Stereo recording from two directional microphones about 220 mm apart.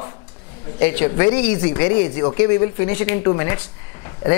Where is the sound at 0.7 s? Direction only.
15° left (ahead or behind).